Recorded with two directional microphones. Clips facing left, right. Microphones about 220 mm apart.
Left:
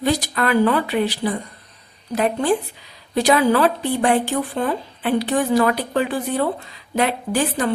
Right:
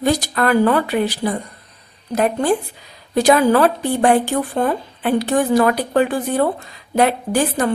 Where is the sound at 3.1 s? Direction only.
45° right (ahead or behind).